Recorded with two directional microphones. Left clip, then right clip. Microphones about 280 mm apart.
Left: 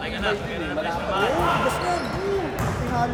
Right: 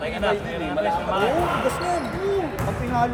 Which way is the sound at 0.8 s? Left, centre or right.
Right.